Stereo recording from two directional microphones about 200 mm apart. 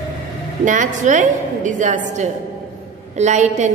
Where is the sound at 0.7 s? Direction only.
40° right (ahead or behind).